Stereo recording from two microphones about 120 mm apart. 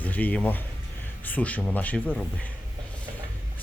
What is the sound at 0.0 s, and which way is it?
A man's voice, 15° left (ahead or behind).